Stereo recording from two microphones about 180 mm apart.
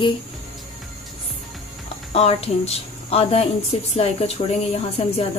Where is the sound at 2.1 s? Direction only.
35° left (ahead or behind).